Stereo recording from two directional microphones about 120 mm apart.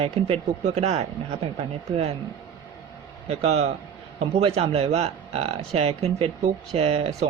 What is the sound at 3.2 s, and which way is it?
Speech, 60° right (ahead or behind).